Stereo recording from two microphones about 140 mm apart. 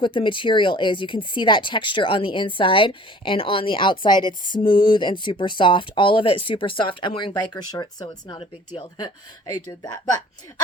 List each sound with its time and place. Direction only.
0.0 s speech: 35° left (ahead or behind)
8.4 s speech: 40° left (ahead or behind)